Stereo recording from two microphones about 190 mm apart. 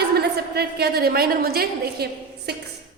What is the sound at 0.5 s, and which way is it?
A woman's voice, 55° right (ahead or behind).